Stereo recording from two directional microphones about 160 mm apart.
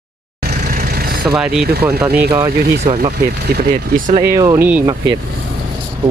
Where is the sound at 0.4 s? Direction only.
85° right.